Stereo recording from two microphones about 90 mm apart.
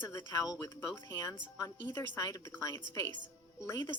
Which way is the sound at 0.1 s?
35° left (ahead or behind).